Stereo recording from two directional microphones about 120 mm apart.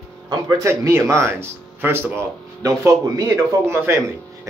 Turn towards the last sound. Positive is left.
turn(degrees=-25)  # may be behind; listen again after turning